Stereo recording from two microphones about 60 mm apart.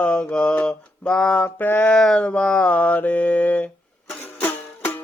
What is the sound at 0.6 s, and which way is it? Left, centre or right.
Speech, centre.